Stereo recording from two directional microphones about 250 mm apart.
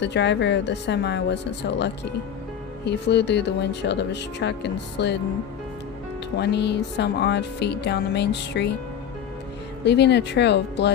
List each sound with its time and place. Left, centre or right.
0.0 s speech: left
2.8 s speech: left
6.3 s speech: left
9.8 s speech: left